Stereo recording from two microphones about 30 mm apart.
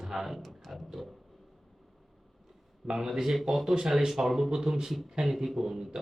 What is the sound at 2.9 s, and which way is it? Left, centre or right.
Speech, centre.